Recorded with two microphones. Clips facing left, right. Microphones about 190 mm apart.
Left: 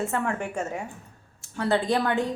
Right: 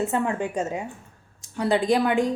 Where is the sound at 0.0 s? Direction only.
20° right (ahead or behind).